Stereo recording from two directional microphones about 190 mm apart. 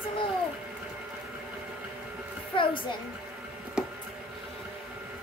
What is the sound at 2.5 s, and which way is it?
Speech, 25° left (ahead or behind).